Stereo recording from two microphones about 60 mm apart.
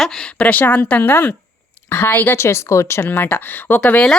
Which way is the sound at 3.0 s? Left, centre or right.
Left.